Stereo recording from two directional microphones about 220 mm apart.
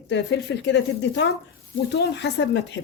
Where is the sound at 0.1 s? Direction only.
55° left (ahead or behind).